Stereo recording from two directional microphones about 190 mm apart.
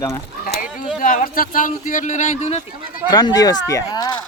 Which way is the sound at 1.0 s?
45° left (ahead or behind).